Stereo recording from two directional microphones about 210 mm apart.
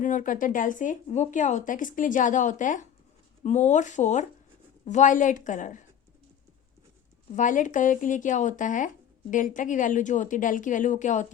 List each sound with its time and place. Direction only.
0.0 s speech: 40° left (ahead or behind)
7.3 s speech: 40° left (ahead or behind)